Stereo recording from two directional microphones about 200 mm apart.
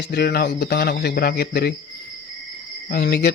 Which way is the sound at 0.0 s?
55° left (ahead or behind).